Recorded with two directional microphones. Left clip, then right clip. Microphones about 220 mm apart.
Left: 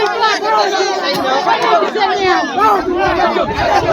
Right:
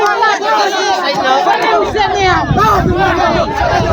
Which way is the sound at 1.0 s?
25° right (ahead or behind).